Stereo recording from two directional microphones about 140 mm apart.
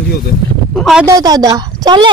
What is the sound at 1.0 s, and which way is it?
A woman's voice, 25° right (ahead or behind).